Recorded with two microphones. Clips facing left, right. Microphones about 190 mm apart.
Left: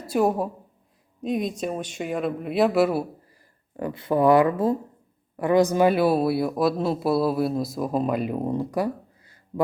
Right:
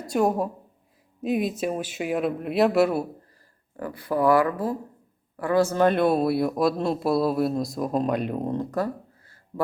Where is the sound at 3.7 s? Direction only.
20° left (ahead or behind).